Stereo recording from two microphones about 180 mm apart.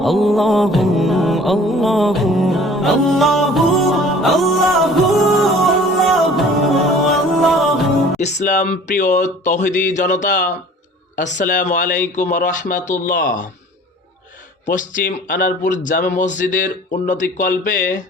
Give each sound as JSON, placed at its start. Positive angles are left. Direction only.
{"t": 0.0, "sound": "music", "side_deg": 0}
{"t": 8.2, "sound": "speech", "side_deg": 40}
{"t": 14.7, "sound": "speech", "side_deg": 50}